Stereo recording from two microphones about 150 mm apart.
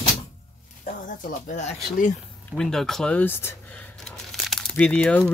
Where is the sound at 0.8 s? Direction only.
60° left (ahead or behind).